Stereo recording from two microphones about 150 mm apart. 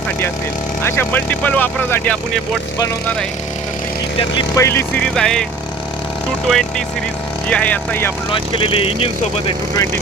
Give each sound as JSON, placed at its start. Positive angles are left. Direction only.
{"t": 0.8, "sound": "speech", "side_deg": 15}
{"t": 4.5, "sound": "speech", "side_deg": 20}
{"t": 5.0, "sound": "speech", "side_deg": 5}
{"t": 6.5, "sound": "speech", "side_deg": 5}
{"t": 8.3, "sound": "speech", "side_deg": 35}